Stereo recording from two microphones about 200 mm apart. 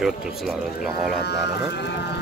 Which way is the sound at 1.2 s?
55° left (ahead or behind).